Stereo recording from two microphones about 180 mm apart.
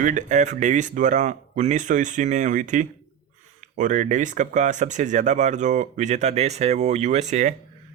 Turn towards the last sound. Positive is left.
turn(degrees=-40)  # may be behind; listen again after turning